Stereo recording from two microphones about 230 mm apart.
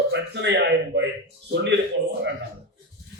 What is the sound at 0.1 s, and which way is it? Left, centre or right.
Speech, right.